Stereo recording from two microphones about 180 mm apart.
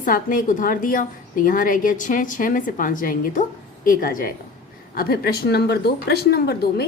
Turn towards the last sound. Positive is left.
turn(degrees=60)  # may be behind; listen again after turning